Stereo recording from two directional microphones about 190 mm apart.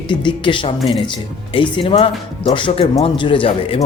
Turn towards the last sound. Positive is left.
turn(degrees=30)  # may be behind; listen again after turning